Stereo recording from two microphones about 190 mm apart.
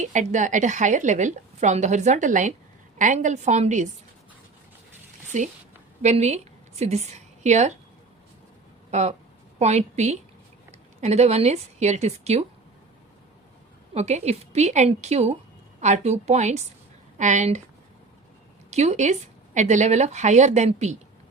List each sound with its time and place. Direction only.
0.0 s a woman's voice: 40° right (ahead or behind)
5.3 s a woman's voice: 40° right (ahead or behind)
8.9 s a woman's voice: 35° right (ahead or behind)
13.9 s a woman's voice: 35° right (ahead or behind)
18.7 s a woman's voice: 35° right (ahead or behind)